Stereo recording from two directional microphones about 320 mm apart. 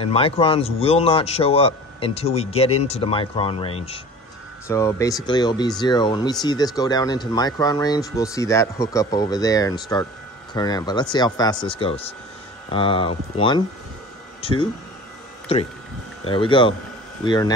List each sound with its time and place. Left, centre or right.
0.0 s a man's voice: centre